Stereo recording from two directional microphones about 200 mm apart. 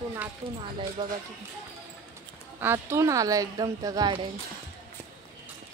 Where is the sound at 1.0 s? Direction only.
25° right (ahead or behind).